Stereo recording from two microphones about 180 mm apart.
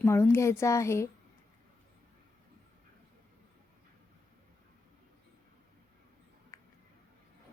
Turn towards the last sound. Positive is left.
turn(degrees=15)  # may be behind; listen again after turning